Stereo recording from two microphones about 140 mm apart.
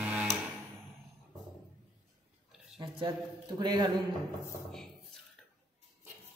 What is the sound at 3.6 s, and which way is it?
Speech, 30° right (ahead or behind).